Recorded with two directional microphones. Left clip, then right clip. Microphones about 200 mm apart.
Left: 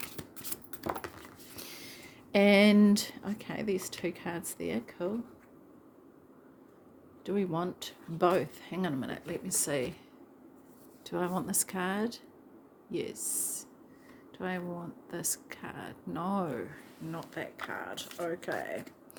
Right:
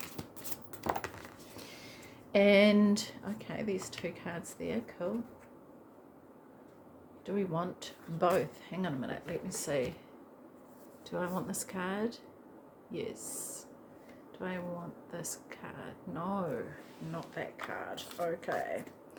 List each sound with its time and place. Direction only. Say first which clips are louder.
0.9 s a sound: right 2 dB; 10° left (ahead or behind)
1.5 s speech: left 5 dB; 55° left (ahead or behind)
7.3 s speech: left 2 dB; 45° left (ahead or behind)
11.0 s speech: left 3 dB; 55° left (ahead or behind)